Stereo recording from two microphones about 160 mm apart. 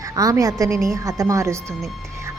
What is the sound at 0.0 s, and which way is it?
A woman's voice, 20° right (ahead or behind).